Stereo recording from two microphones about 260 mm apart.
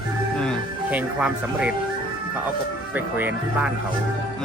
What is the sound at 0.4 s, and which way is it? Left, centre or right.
Speech, centre.